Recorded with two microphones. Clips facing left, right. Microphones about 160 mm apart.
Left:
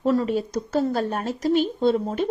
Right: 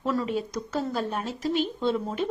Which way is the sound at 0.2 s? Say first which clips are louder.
Left 5 dB; 35° left (ahead or behind).